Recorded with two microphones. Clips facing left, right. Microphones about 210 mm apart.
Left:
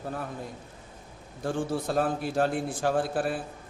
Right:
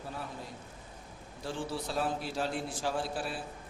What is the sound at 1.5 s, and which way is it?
A man's voice, 50° left (ahead or behind).